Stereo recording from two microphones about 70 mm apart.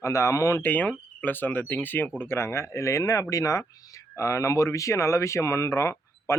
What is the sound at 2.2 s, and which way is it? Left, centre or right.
Speech, left.